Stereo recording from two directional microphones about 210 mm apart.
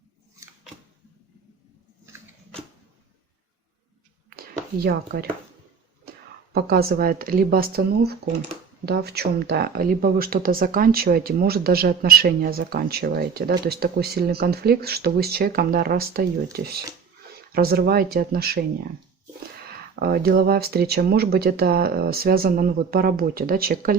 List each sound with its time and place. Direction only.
4.4 s a sound: 50° right (ahead or behind)
6.1 s speech: 45° right (ahead or behind)
20.0 s speech: 45° right (ahead or behind)